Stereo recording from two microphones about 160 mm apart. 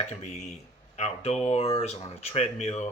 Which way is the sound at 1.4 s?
40° left (ahead or behind).